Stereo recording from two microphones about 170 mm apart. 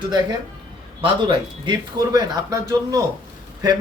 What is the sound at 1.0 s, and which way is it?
A man's voice, 30° right (ahead or behind).